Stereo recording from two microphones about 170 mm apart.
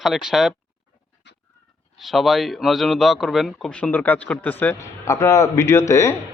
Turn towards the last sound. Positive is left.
turn(degrees=15)  # may be behind; listen again after turning